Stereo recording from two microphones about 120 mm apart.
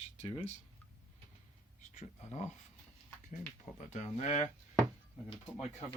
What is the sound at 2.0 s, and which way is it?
Speech, 70° left (ahead or behind).